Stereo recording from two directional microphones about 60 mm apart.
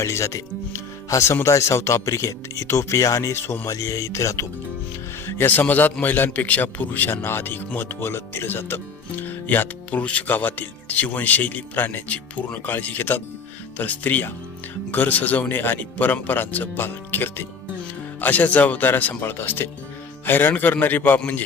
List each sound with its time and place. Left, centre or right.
0.0 s speech: left
3.7 s speech: left
5.2 s a man's voice: left
18.2 s a man's voice: left